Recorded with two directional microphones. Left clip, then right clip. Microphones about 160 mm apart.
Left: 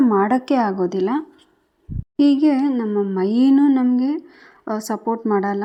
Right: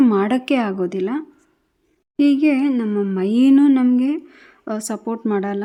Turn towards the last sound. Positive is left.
turn(degrees=-5)  # may be behind; listen again after turning